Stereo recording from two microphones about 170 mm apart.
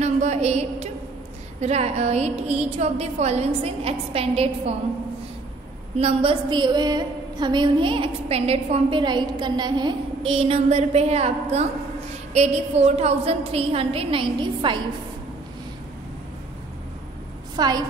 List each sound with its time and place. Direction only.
0.0 s a sound: 40° right (ahead or behind)
1.6 s a woman's voice: 40° right (ahead or behind)
5.9 s a woman's voice: 35° right (ahead or behind)
17.6 s a woman's voice: 25° right (ahead or behind)